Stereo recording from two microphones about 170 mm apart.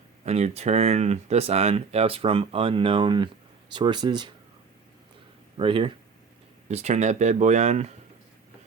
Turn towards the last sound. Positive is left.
turn(degrees=-40)  # may be behind; listen again after turning